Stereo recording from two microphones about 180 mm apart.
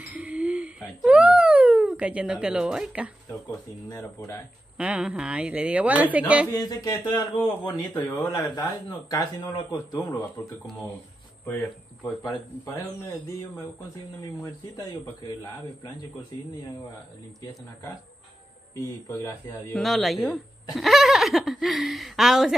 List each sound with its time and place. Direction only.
0.1 s whimper: 5° right (ahead or behind)
3.9 s speech: 20° left (ahead or behind)
4.7 s speech: 5° right (ahead or behind)
6.5 s speech: 20° left (ahead or behind)
12.7 s speech: 15° left (ahead or behind)
14.4 s speech: 20° left (ahead or behind)
18.8 s speech: 20° left (ahead or behind)
19.7 s speech: centre (ahead or behind)